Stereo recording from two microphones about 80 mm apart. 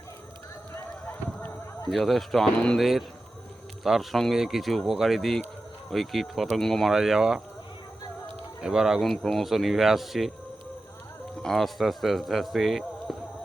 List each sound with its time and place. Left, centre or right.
0.7 s run: left
1.9 s speech: centre
6.9 s speech: centre
8.6 s speech: centre
11.4 s speech: centre